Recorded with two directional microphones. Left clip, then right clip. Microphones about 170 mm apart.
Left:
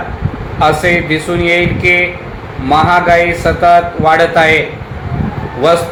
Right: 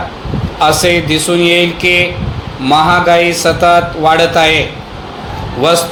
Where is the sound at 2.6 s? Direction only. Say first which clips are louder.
Even; 40° right (ahead or behind).